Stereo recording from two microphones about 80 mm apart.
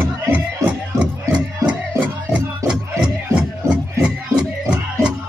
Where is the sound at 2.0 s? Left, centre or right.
Centre.